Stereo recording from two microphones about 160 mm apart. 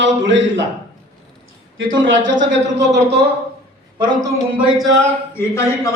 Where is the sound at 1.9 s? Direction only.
55° right (ahead or behind).